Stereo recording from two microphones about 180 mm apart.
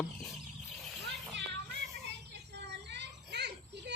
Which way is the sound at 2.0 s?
70° right (ahead or behind).